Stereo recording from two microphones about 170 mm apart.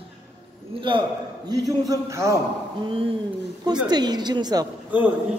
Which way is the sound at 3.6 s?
25° right (ahead or behind).